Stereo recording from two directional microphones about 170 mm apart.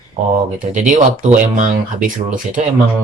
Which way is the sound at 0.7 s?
50° right (ahead or behind).